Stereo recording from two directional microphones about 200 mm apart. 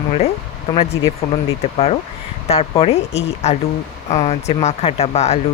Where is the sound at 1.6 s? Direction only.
35° left (ahead or behind).